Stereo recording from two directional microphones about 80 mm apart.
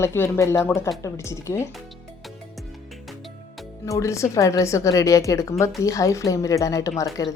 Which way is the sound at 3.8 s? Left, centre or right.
Left.